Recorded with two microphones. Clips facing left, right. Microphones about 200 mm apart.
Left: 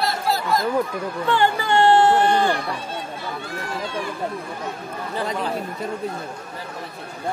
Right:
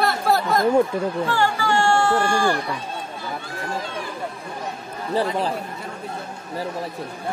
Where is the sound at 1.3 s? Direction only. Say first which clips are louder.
Left 7 dB; 20° left (ahead or behind).